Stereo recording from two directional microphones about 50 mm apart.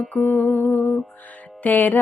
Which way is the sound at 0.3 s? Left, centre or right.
Left.